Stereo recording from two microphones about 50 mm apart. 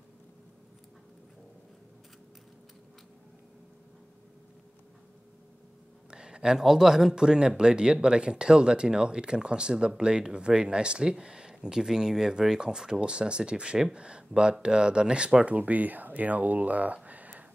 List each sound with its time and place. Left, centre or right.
6.0 s speech: centre